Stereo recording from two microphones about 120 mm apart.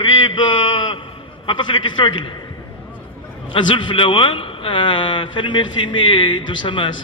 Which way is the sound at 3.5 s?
45° left (ahead or behind).